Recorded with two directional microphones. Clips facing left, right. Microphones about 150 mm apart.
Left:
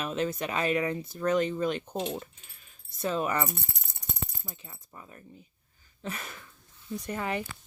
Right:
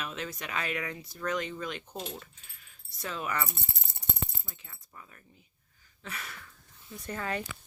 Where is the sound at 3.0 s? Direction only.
30° left (ahead or behind).